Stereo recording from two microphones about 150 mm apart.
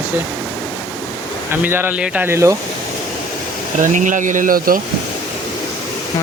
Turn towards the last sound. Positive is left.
turn(degrees=-65)  # may be behind; listen again after turning